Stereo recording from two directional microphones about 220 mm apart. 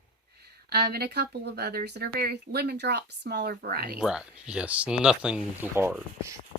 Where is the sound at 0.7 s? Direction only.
45° right (ahead or behind).